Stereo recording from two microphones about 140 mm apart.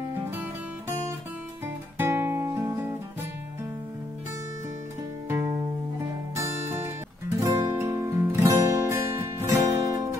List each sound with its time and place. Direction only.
2.0 s music: 15° right (ahead or behind)
6.3 s music: 15° right (ahead or behind)